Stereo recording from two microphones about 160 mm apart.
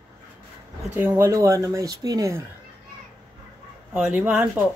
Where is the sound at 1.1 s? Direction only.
20° right (ahead or behind).